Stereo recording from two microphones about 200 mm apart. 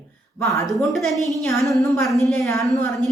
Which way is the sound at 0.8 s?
Centre (ahead or behind).